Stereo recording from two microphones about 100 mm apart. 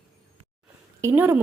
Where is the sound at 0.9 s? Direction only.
25° right (ahead or behind).